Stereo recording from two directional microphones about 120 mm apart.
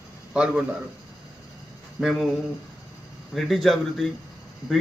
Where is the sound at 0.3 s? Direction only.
10° right (ahead or behind).